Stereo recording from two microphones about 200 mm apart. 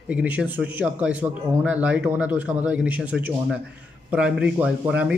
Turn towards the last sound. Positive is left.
turn(degrees=-5)  # may be behind; listen again after turning